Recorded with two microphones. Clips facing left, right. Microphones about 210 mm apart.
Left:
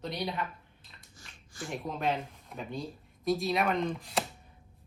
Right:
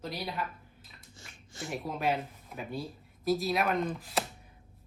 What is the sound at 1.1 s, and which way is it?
Shuffling cards, 25° right (ahead or behind).